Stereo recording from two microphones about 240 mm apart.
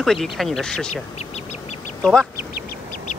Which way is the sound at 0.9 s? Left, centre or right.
Left.